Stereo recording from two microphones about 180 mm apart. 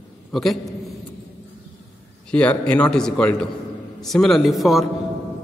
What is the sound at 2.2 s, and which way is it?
Speech, 5° left (ahead or behind).